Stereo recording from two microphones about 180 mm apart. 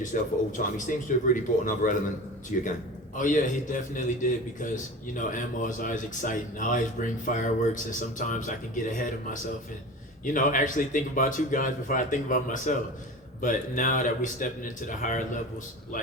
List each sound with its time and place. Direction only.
0.0 s a man's voice: 45° left (ahead or behind)